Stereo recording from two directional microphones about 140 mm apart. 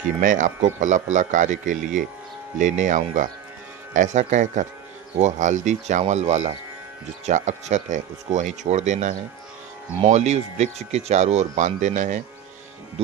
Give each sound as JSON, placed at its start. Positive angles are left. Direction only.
{"t": 0.2, "sound": "speech", "side_deg": -70}